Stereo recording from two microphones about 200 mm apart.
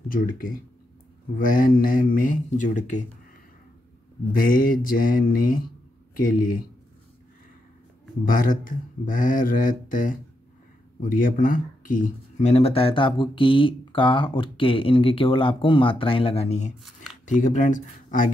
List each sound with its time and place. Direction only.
0.1 s speech: 45° left (ahead or behind)
4.3 s speech: 45° left (ahead or behind)
8.3 s speech: 45° left (ahead or behind)